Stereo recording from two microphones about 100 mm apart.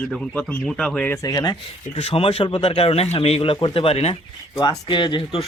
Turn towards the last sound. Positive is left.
turn(degrees=55)  # may be behind; listen again after turning